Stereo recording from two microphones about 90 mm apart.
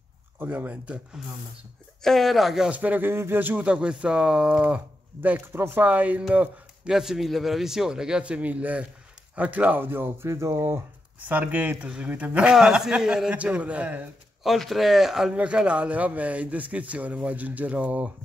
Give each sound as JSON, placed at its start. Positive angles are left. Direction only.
{"t": 0.4, "sound": "speech", "side_deg": -20}
{"t": 1.2, "sound": "speech", "side_deg": -5}
{"t": 2.8, "sound": "speech", "side_deg": -20}
{"t": 6.9, "sound": "speech", "side_deg": -5}
{"t": 14.4, "sound": "speech", "side_deg": 0}